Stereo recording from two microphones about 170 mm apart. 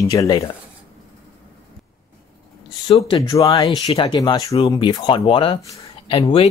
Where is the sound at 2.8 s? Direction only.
30° left (ahead or behind).